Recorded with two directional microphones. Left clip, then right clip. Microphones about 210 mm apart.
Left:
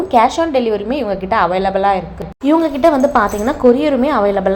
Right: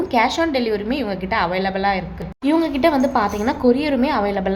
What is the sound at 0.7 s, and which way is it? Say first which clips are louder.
A woman's voice: left 5 dB; 10° left (ahead or behind).